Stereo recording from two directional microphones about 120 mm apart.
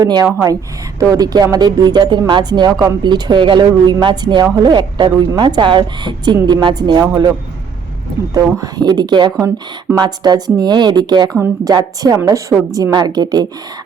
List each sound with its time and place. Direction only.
0.0 s speech: 35° right (ahead or behind)